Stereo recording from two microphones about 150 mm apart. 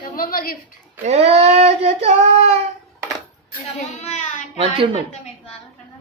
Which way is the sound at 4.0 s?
45° left (ahead or behind).